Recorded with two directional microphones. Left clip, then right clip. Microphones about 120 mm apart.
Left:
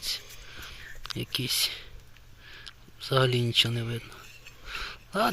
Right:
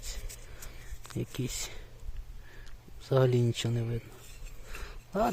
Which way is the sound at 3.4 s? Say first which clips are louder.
Left 9 dB; 25° right (ahead or behind).